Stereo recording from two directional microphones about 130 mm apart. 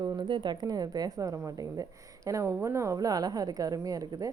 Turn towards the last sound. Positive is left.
turn(degrees=-25)  # may be behind; listen again after turning